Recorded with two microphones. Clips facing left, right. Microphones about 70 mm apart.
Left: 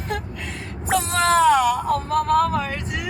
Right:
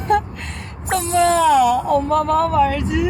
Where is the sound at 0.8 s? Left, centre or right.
Centre.